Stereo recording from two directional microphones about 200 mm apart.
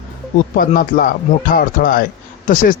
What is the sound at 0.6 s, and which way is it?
Speech, 45° left (ahead or behind).